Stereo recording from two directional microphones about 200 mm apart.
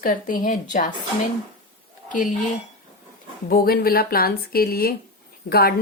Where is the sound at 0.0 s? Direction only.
40° left (ahead or behind).